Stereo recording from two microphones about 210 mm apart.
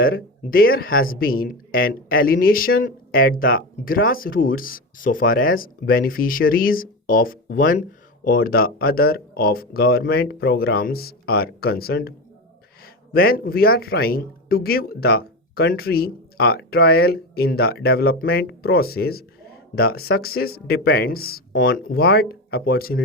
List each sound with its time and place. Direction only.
0.0 s speech: 45° left (ahead or behind)